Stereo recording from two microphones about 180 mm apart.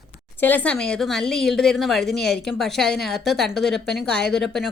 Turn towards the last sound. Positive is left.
turn(degrees=0)  # may be behind; listen again after turning